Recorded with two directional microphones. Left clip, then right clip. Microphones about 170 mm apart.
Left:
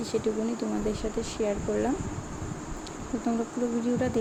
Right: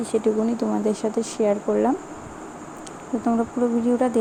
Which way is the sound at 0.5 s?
35° right (ahead or behind).